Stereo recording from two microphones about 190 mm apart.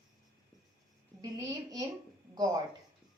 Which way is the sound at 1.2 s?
20° right (ahead or behind).